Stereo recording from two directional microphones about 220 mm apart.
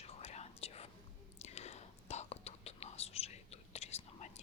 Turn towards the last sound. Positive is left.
turn(degrees=30)  # may be behind; listen again after turning